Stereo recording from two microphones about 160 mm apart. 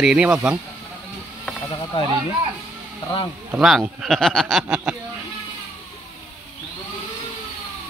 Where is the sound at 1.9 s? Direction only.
30° left (ahead or behind).